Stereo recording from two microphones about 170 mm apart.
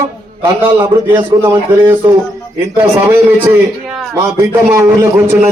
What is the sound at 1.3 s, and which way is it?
Speech, 20° right (ahead or behind).